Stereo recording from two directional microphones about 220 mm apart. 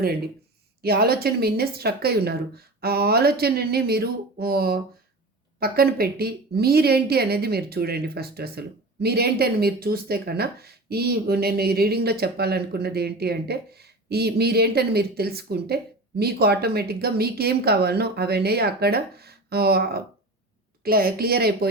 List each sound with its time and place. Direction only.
0.8 s a woman's voice: 45° right (ahead or behind)